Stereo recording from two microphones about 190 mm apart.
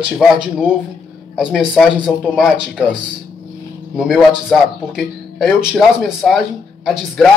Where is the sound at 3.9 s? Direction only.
Centre (ahead or behind).